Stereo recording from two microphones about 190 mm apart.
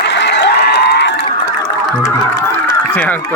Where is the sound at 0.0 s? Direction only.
65° left (ahead or behind).